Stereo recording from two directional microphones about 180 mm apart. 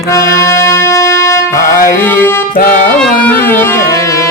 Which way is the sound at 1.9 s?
10° left (ahead or behind).